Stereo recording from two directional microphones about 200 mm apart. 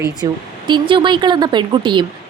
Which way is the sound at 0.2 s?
15° right (ahead or behind).